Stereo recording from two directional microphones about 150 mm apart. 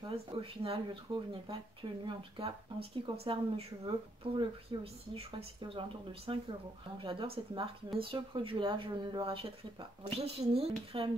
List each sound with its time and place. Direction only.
0.1 s speech: 40° right (ahead or behind)